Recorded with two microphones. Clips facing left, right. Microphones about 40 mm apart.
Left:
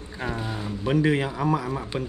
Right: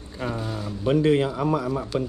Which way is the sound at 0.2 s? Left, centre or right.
Left.